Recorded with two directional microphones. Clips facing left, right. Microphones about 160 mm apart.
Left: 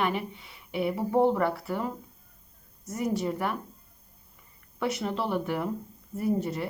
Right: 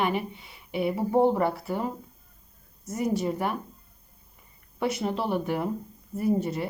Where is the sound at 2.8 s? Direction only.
5° right (ahead or behind).